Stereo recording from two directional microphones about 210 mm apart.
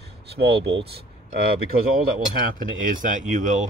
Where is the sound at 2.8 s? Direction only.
40° right (ahead or behind).